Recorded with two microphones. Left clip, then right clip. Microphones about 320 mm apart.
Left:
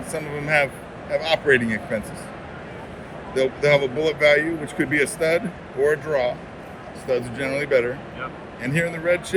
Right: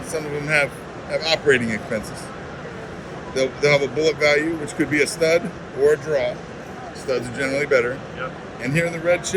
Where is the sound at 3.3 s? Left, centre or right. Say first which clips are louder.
Even; centre.